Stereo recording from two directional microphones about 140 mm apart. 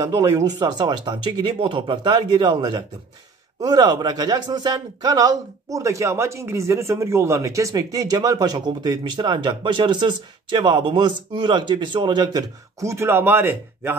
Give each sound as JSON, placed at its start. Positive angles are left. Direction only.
{"t": 0.0, "sound": "a man's voice", "side_deg": -25}
{"t": 12.9, "sound": "speech", "side_deg": -15}